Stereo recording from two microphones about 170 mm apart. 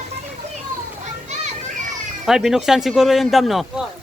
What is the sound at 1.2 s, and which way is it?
Children playing, 45° right (ahead or behind).